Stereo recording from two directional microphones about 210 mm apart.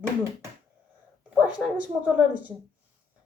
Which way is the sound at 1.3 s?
5° right (ahead or behind).